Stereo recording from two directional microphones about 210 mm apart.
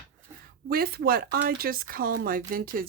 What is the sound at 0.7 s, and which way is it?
Speech, 45° right (ahead or behind).